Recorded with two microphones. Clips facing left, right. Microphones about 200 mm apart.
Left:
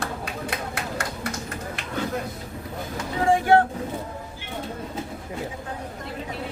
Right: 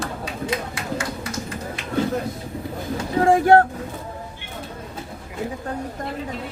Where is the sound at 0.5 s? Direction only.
60° left (ahead or behind).